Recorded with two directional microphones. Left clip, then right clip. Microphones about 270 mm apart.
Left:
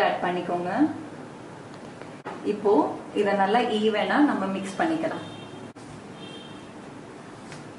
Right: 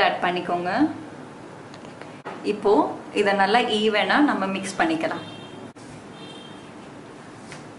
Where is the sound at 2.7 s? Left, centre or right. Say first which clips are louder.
Right 2 dB; centre.